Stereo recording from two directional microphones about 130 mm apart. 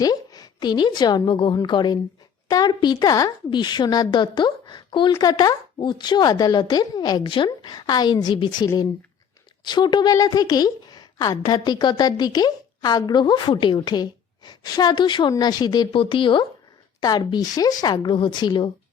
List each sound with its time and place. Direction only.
0.0 s a woman's voice: 30° left (ahead or behind)